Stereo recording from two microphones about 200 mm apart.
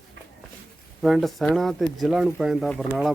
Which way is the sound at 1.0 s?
Centre (ahead or behind).